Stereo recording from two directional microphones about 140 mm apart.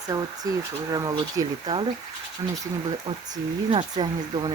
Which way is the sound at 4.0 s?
35° right (ahead or behind).